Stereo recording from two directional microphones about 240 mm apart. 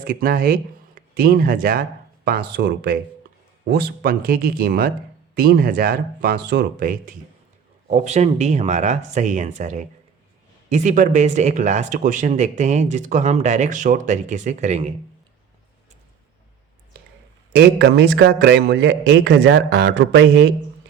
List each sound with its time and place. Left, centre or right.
0.1 s speech: right
17.5 s a man's voice: right